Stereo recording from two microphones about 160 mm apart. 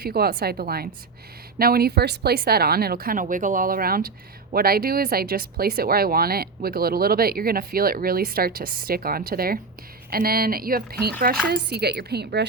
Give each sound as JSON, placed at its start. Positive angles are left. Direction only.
{"t": 0.0, "sound": "speech", "side_deg": -75}
{"t": 11.5, "sound": "a woman's voice", "side_deg": -90}